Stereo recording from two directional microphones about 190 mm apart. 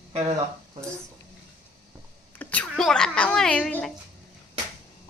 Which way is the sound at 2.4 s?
10° left (ahead or behind).